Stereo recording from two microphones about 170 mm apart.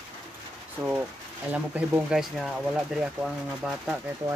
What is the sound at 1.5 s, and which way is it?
Speech, 10° right (ahead or behind).